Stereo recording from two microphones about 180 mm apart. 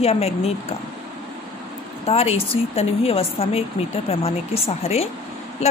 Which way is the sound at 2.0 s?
35° left (ahead or behind).